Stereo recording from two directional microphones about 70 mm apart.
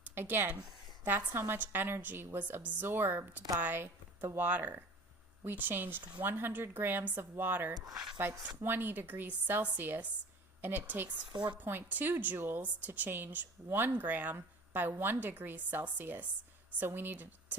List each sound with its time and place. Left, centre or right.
0.0 s a sound: right
1.0 s a woman's voice: right
7.7 s speech: right
8.4 s a woman's voice: right
11.2 s a woman's voice: right
11.5 s a woman's voice: right